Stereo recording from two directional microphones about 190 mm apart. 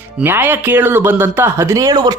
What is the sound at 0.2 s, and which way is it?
Speech, 10° right (ahead or behind).